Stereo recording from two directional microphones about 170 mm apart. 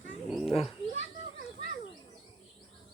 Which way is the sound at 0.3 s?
Centre (ahead or behind).